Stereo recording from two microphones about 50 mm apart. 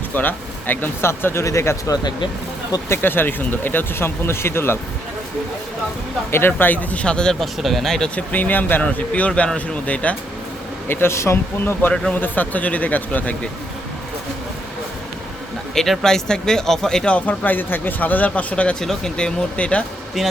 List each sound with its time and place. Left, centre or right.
0.1 s speech: left
1.0 s speech: left
2.9 s speech: left
6.3 s speech: left
6.9 s speech: left
7.3 s speech: centre
8.1 s speech: left
10.8 s speech: left
11.1 s speech: left
11.6 s speech: left
15.7 s speech: centre
17.1 s speech: left
18.8 s speech: centre